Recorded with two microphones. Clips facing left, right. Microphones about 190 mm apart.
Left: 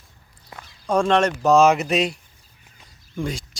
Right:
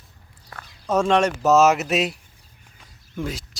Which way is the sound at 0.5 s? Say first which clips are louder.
Even; 15° left (ahead or behind).